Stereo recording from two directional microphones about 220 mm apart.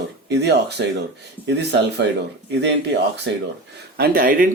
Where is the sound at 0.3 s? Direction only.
50° right (ahead or behind).